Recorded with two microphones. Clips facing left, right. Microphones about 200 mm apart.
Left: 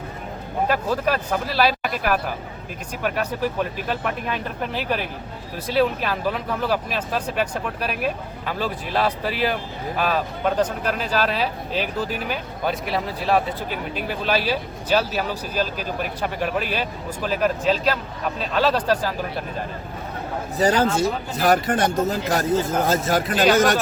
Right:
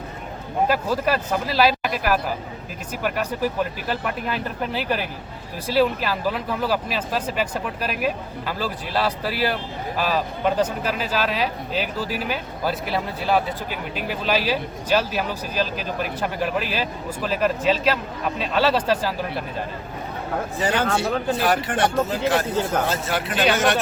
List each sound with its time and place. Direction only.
0.7 s speech: 10° right (ahead or behind)
20.6 s speech: 40° left (ahead or behind)